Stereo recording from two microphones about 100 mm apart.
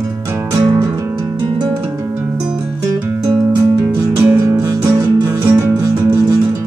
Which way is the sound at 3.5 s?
25° right (ahead or behind).